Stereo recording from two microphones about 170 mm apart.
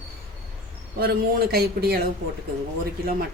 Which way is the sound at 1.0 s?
65° right (ahead or behind).